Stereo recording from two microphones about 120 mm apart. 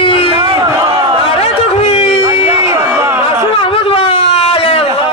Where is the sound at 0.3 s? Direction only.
45° right (ahead or behind).